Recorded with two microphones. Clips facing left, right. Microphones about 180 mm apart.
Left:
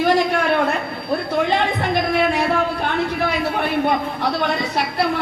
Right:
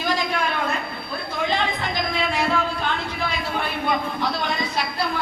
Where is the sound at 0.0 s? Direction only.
65° left (ahead or behind).